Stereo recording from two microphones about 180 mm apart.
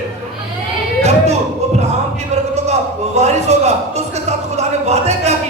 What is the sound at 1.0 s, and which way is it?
Speech, 35° right (ahead or behind).